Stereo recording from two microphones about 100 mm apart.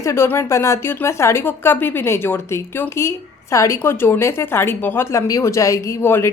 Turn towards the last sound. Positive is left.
turn(degrees=25)  # may be behind; listen again after turning